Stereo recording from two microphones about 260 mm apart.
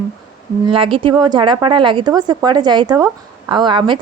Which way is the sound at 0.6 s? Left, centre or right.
Centre.